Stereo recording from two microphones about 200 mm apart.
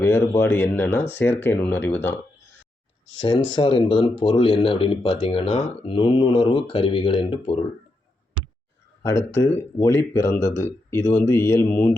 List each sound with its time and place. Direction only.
0.0 s speech: 10° left (ahead or behind)
3.2 s speech: 20° left (ahead or behind)
9.0 s speech: 15° left (ahead or behind)